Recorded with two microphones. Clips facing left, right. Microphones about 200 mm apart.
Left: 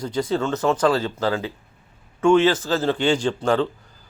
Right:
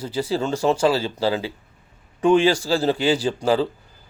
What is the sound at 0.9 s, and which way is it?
Speech, 25° right (ahead or behind).